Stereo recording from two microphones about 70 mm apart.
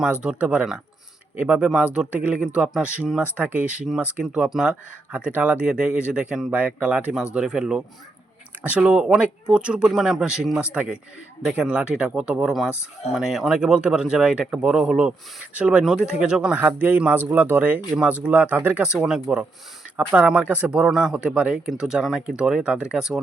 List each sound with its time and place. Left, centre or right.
0.0 s speech: centre
4.4 s speech: centre
4.7 s speech: centre
6.5 s speech: right
17.9 s speech: centre
19.0 s speech: centre
20.0 s speech: right; by 23.2 s centre